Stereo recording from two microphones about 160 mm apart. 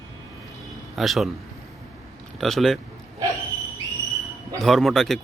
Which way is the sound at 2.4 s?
Centre (ahead or behind).